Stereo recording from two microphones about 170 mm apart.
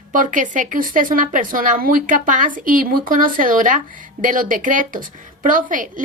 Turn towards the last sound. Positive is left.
turn(degrees=-50)  # may be behind; listen again after turning